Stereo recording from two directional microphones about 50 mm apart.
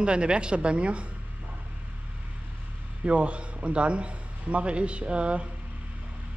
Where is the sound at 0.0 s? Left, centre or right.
Right.